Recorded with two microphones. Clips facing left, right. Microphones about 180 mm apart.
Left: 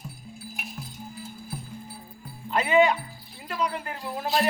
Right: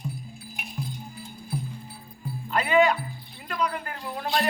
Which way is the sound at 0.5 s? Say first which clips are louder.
Right 6 dB; centre (ahead or behind).